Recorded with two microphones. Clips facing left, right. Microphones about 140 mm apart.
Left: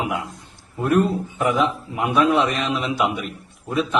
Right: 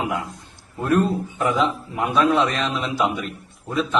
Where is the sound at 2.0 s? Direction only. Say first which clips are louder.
Left 1 dB; 15° left (ahead or behind).